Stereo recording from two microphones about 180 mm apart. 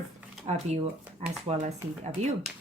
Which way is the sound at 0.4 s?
40° right (ahead or behind).